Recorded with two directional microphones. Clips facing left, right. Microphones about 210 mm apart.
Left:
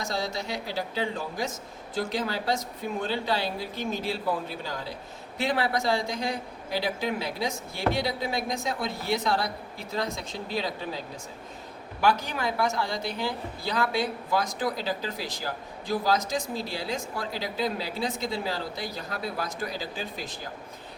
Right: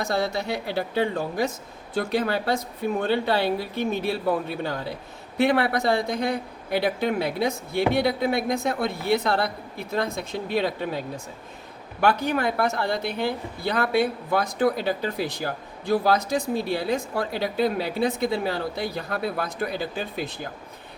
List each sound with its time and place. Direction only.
0.0 s speech: 60° right (ahead or behind)